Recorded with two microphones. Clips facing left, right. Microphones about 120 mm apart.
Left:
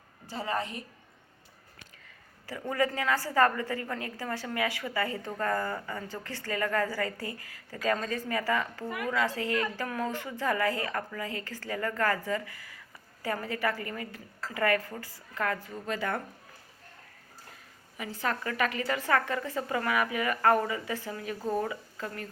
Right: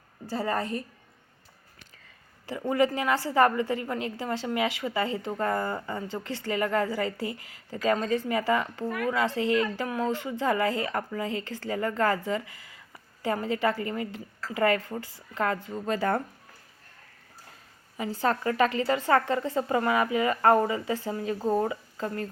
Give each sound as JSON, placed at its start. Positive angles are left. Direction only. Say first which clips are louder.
{"t": 0.3, "sound": "a woman's voice", "louder": "right 4 dB", "side_deg": -40}
{"t": 2.5, "sound": "a woman's voice", "louder": "right 5 dB", "side_deg": -20}
{"t": 17.9, "sound": "a woman's voice", "louder": "right 6 dB", "side_deg": -30}